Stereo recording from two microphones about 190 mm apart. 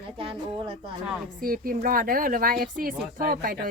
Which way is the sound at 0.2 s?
30° right (ahead or behind).